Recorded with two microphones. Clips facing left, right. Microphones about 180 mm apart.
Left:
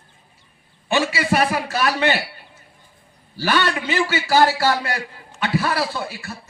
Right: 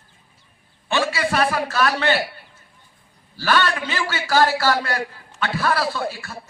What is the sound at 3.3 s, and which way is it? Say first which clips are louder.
A man's voice: even; 15° left (ahead or behind).